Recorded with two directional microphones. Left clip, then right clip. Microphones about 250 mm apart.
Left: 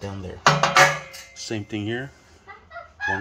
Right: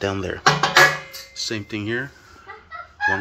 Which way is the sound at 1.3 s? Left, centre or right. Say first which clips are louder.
Right 3 dB; centre.